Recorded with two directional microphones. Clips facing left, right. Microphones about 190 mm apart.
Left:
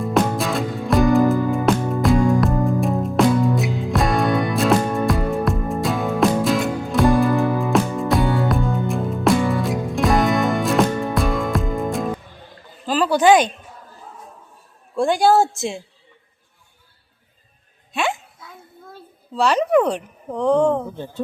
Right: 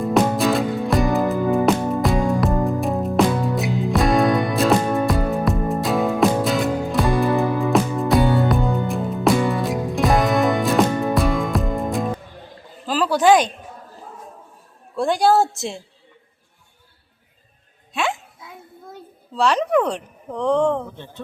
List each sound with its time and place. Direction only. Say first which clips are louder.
0.0 s music: right 2 dB; centre (ahead or behind)
12.8 s a sound: left 1 dB; centre (ahead or behind)
14.9 s speech: left 1 dB; centre (ahead or behind)
17.9 s a child's voice: left 1 dB; centre (ahead or behind)
18.4 s a sound: right 2 dB; 20° right (ahead or behind)
19.4 s speech: left 2 dB; centre (ahead or behind)